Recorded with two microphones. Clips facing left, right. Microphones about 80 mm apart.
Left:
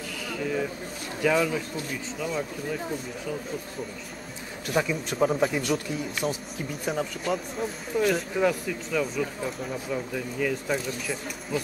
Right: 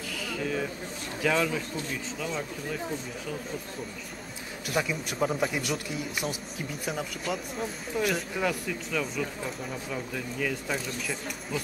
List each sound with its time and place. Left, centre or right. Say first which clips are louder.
0.3 s a man's voice: left 3 dB; centre
4.7 s speech: left 4 dB; centre
5.5 s a man's voice: left 4 dB; centre